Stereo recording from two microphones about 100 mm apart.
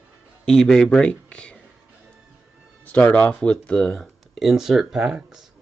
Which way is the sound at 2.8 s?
15° left (ahead or behind).